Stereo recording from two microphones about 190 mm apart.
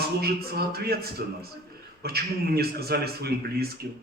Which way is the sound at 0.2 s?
55° right (ahead or behind).